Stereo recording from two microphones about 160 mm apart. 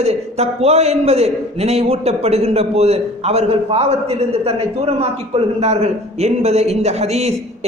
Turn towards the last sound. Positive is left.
turn(degrees=-40)  # may be behind; listen again after turning